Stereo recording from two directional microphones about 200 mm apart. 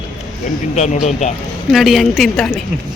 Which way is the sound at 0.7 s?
35° left (ahead or behind).